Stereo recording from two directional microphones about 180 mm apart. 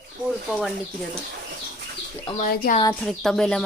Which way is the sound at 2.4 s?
50° left (ahead or behind).